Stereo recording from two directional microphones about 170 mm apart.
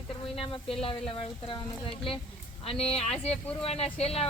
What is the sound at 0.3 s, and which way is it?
Speech, 35° left (ahead or behind).